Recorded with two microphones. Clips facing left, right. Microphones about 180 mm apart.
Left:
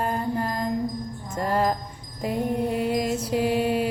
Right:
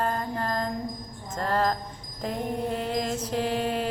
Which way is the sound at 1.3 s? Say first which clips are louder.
Left 2 dB; 10° left (ahead or behind).